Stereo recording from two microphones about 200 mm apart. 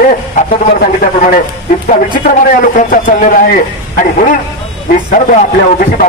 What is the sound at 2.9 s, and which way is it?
A man's voice, 40° left (ahead or behind).